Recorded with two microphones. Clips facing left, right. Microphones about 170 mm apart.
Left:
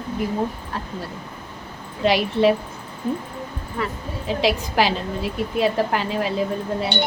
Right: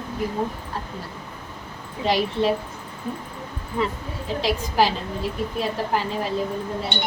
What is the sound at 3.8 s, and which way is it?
Speech, 20° right (ahead or behind).